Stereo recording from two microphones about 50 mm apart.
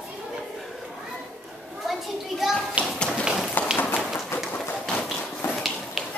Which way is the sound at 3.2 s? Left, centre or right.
Centre.